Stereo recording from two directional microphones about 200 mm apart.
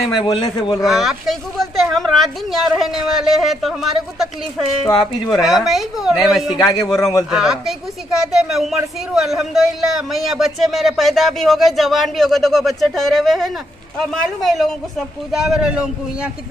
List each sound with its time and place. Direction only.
0.2 s a man's voice: 25° left (ahead or behind)
0.8 s speech: centre (ahead or behind)
6.6 s a man's voice: 20° left (ahead or behind)
7.2 s speech: centre (ahead or behind)